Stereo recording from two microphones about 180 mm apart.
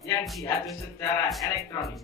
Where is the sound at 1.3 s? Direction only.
Centre (ahead or behind).